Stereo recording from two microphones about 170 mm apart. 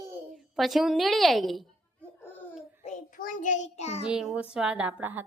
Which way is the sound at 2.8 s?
45° left (ahead or behind).